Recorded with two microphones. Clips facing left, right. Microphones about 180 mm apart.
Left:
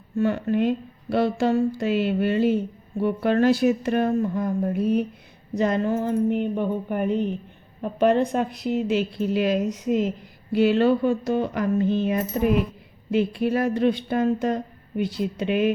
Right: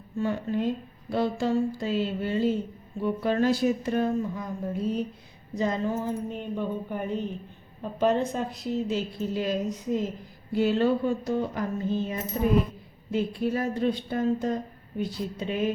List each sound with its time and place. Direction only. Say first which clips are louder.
0.2 s speech: left 6 dB; 70° left (ahead or behind)
10.5 s mechanisms: left 5 dB; 80° left
13.1 s speech: left 5 dB; 75° left (ahead or behind)